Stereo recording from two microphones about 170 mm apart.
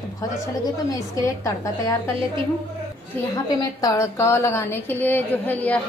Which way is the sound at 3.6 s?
20° left (ahead or behind).